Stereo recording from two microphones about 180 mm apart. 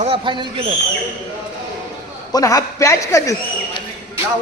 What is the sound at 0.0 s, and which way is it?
Speech, 30° right (ahead or behind).